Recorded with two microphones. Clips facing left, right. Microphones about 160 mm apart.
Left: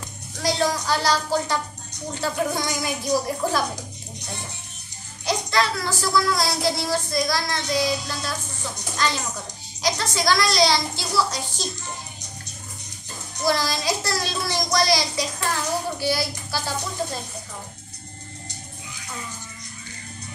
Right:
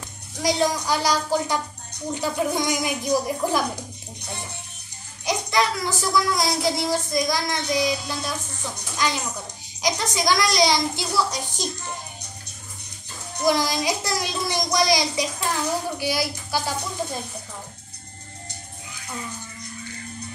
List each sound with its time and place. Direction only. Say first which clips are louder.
0.4 s speech: right 1 dB; 15° right (ahead or behind)
5.2 s speech: even; 15° right (ahead or behind)
13.4 s speech: right 2 dB; 15° right (ahead or behind)